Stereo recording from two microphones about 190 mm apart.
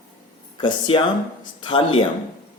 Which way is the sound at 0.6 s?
25° left (ahead or behind).